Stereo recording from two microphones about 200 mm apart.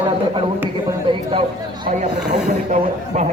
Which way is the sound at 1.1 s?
25° right (ahead or behind).